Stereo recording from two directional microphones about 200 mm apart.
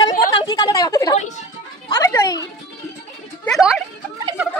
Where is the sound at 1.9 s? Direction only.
15° left (ahead or behind).